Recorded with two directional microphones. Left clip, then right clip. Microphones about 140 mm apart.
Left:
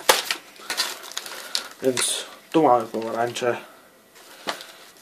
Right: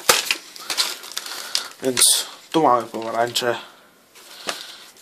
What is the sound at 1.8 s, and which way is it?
Speech, 25° right (ahead or behind).